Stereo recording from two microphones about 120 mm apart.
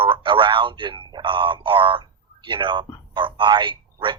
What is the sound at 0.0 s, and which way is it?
Speech, 45° right (ahead or behind).